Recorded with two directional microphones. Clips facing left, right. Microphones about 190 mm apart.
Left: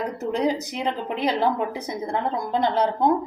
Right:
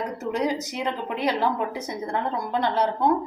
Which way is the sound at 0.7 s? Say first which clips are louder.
Left 1 dB; 20° left (ahead or behind).